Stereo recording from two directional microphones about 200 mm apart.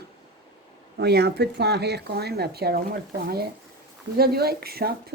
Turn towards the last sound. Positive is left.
turn(degrees=-50)  # may be behind; listen again after turning